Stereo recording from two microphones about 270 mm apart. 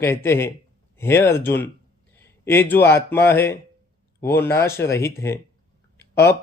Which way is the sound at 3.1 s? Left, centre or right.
Centre.